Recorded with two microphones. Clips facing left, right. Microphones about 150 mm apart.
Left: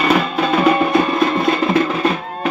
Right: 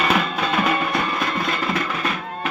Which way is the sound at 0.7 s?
30° left (ahead or behind).